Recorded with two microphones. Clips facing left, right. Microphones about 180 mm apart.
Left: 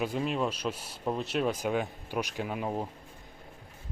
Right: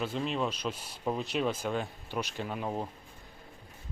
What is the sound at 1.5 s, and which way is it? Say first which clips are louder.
Speech: left 3 dB; 15° left (ahead or behind).